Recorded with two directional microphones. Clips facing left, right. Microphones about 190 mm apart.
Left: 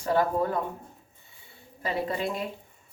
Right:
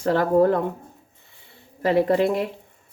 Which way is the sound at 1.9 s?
80° right.